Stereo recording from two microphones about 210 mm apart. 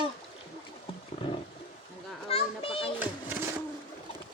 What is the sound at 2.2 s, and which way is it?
Children playing, 25° left (ahead or behind).